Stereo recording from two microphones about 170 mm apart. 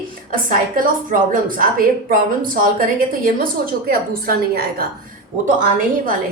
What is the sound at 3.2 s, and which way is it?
A woman's voice, 55° right (ahead or behind).